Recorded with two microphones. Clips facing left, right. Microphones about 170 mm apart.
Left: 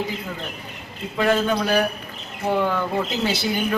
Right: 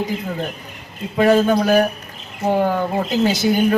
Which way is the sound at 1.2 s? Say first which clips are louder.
Right 6 dB; 40° right (ahead or behind).